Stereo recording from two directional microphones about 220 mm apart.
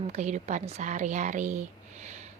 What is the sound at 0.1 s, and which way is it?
Speech, 30° right (ahead or behind).